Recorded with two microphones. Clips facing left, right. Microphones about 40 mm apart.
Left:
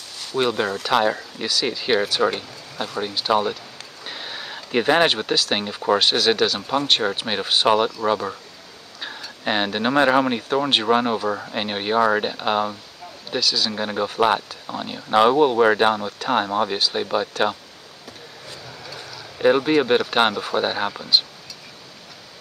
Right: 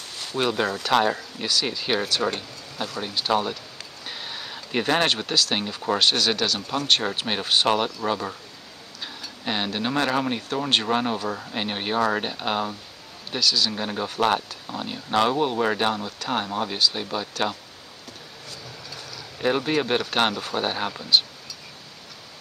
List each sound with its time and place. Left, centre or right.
0.4 s speech: centre
9.4 s speech: left
18.9 s speech: centre